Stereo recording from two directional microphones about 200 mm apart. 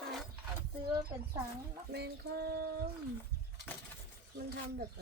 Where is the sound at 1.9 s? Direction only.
55° right (ahead or behind).